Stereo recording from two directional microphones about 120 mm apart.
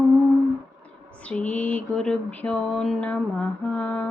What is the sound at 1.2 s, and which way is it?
Speech, 10° left (ahead or behind).